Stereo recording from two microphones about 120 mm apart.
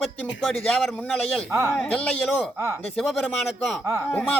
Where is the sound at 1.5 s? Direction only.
25° right (ahead or behind).